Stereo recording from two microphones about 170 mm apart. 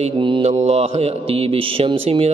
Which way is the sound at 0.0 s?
30° right (ahead or behind).